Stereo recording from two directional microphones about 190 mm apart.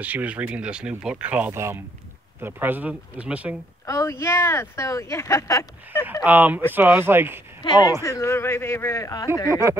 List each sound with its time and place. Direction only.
0.0 s speech: 10° right (ahead or behind)
3.8 s speech: 15° left (ahead or behind)
6.2 s speech: 10° right (ahead or behind)
7.6 s speech: 20° left (ahead or behind)
9.5 s speech: 15° right (ahead or behind)